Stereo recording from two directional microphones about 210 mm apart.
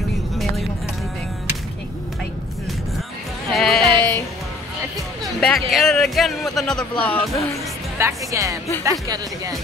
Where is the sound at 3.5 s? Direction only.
Centre (ahead or behind).